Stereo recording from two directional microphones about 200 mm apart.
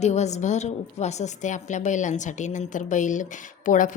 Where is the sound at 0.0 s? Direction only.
35° left (ahead or behind).